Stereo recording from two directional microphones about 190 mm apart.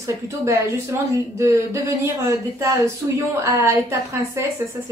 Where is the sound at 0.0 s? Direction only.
15° right (ahead or behind).